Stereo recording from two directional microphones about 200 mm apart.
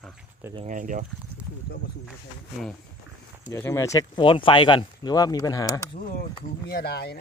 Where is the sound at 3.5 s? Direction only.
15° left (ahead or behind).